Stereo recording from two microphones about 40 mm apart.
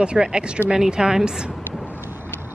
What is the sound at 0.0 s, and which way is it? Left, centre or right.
A woman's voice, right.